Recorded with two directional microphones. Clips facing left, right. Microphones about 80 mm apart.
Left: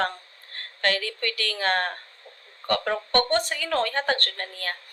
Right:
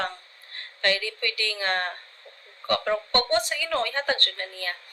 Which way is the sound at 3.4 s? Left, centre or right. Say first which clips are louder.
Left 1 dB; left.